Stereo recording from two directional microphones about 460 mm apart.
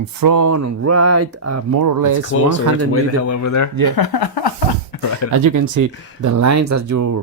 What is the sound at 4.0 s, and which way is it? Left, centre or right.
Speech, left.